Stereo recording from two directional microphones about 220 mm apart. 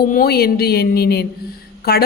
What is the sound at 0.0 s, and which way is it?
A woman's voice, 40° left (ahead or behind).